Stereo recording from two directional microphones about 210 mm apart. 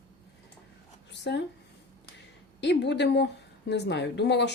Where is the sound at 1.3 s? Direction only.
55° left (ahead or behind).